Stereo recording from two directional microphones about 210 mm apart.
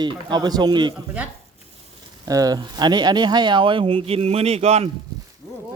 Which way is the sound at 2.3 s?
15° right (ahead or behind).